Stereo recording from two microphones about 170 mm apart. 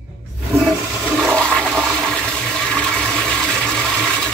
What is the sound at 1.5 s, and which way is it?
Toilet flush, 5° left (ahead or behind).